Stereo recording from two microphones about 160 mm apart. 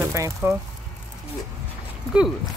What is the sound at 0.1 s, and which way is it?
Speech, 20° right (ahead or behind).